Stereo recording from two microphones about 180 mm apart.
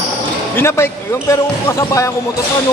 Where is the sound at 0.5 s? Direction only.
15° left (ahead or behind).